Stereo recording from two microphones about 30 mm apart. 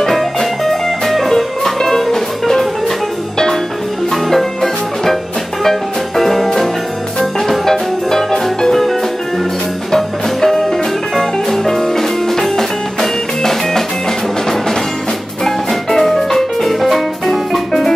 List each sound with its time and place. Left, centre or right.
0.0 s music: centre
1.3 s music: left
4.1 s music: centre
9.8 s music: centre
15.4 s music: centre